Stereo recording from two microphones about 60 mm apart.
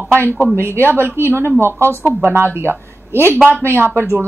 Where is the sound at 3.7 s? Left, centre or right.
Right.